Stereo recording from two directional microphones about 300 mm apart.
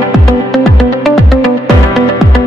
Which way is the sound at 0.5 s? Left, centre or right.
Centre.